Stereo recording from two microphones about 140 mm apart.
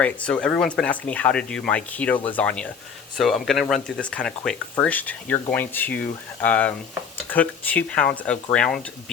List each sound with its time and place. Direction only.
0.0 s speech: 5° left (ahead or behind)